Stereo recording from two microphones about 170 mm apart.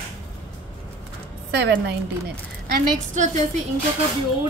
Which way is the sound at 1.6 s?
80° right.